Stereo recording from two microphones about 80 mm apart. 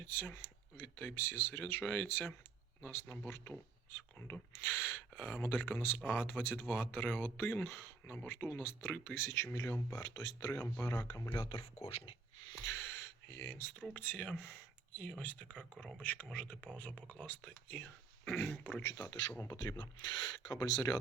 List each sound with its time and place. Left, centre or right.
0.0 s speech: left
10.0 s speech: left
10.5 s speech: left
12.6 s speech: left
18.8 s speech: left